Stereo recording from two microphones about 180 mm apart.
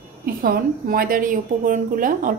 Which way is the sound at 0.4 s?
50° right (ahead or behind).